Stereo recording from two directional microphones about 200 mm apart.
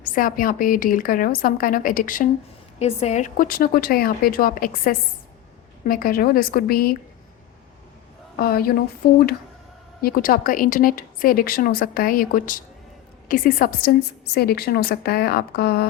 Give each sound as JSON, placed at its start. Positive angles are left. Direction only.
{"t": 0.0, "sound": "speech", "side_deg": 45}
{"t": 2.7, "sound": "speech", "side_deg": 30}
{"t": 8.4, "sound": "speech", "side_deg": 50}